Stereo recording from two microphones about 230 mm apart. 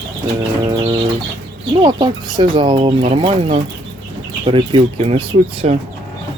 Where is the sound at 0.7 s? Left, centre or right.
Centre.